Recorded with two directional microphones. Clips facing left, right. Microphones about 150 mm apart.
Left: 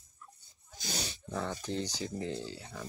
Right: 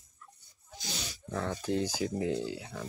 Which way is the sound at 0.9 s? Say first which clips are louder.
Left 3 dB; 35° left (ahead or behind).